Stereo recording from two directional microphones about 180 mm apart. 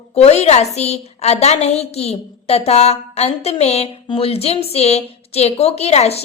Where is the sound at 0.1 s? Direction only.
35° left (ahead or behind).